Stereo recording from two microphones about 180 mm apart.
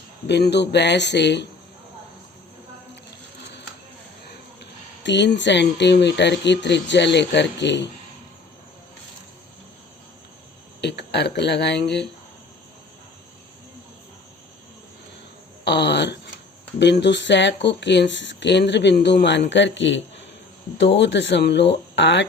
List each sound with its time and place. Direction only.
0.3 s speech: 70° left (ahead or behind)
5.0 s speech: 75° left (ahead or behind)
10.8 s speech: 70° left (ahead or behind)
15.6 s a sound: 70° left (ahead or behind)
16.8 s speech: 75° left (ahead or behind)
19.5 s speech: 85° left
20.7 s speech: 75° left (ahead or behind)